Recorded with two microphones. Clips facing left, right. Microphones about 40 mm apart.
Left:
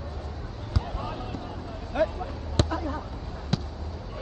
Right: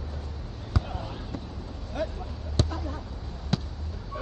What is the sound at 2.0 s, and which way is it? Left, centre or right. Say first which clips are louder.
Speech: left 6 dB; left.